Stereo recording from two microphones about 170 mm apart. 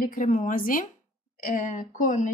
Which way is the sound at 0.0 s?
50° left (ahead or behind).